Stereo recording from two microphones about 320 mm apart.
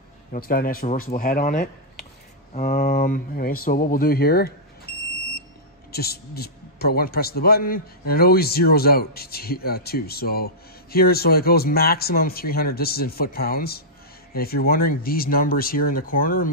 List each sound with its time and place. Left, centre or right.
0.3 s a man's voice: left
5.9 s a man's voice: left